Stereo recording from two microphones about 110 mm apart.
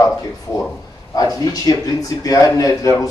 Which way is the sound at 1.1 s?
35° left (ahead or behind).